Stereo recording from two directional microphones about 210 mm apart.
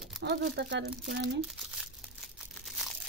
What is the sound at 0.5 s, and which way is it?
Speech, 55° right (ahead or behind).